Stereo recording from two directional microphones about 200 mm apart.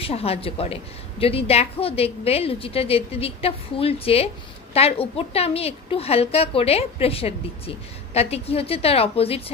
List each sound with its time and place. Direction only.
0.0 s a woman's voice: 30° left (ahead or behind)